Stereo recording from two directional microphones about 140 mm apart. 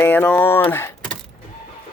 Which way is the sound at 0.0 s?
10° left (ahead or behind).